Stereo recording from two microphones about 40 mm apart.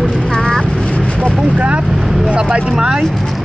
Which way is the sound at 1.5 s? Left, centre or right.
Right.